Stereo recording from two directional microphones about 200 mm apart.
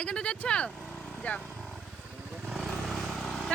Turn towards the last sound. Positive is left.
turn(degrees=0)  # may be behind; listen again after turning